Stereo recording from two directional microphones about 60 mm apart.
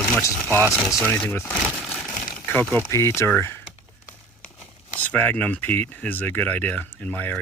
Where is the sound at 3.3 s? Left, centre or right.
Left.